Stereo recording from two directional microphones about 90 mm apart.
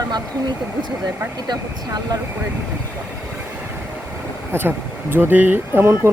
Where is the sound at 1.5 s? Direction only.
50° right (ahead or behind).